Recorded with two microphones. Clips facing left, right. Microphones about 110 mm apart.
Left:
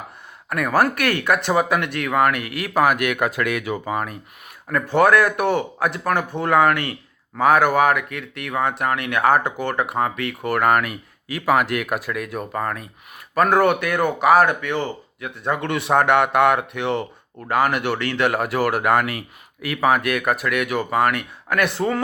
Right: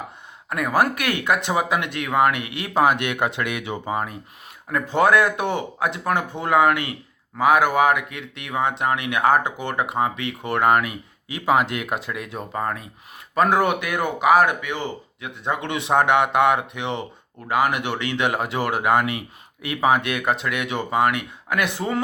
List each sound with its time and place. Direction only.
0.5 s speech: 15° right (ahead or behind)